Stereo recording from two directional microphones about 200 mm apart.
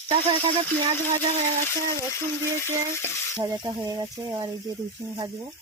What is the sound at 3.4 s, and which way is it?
Speech, 15° right (ahead or behind).